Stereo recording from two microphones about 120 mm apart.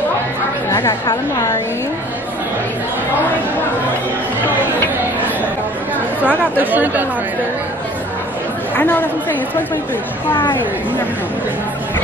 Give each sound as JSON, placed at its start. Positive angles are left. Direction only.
{"t": 0.7, "sound": "chatter", "side_deg": 20}
{"t": 6.2, "sound": "speech", "side_deg": -15}
{"t": 8.7, "sound": "a woman's voice", "side_deg": 15}